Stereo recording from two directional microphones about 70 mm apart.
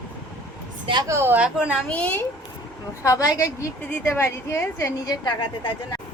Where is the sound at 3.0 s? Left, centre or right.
Left.